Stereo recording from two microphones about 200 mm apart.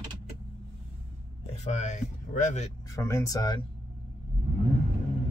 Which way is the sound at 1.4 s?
35° left (ahead or behind).